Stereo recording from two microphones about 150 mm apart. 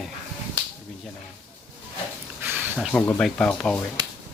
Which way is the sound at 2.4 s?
15° right (ahead or behind).